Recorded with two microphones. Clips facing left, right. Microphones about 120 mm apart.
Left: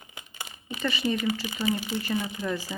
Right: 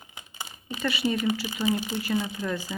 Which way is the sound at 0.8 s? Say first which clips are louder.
Right 1 dB; 5° right (ahead or behind).